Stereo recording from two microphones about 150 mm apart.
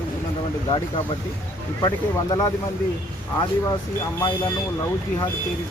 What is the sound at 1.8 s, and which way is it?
Speech, 25° left (ahead or behind).